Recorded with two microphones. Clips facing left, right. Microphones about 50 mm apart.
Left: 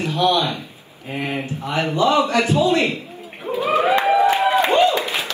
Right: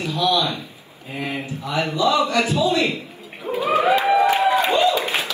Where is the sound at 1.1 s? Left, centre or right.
Left.